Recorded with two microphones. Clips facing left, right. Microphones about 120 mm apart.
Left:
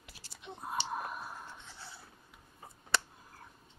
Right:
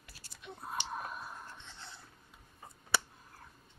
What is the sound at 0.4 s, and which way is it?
Whispering, 20° left (ahead or behind).